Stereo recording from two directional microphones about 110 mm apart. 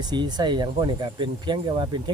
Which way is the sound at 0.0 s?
40° right (ahead or behind).